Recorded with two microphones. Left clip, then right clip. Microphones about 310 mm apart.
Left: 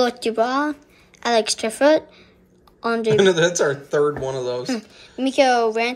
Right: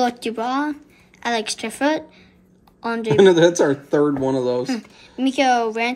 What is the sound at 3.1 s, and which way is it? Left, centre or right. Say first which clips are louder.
Speech: right 5 dB; centre.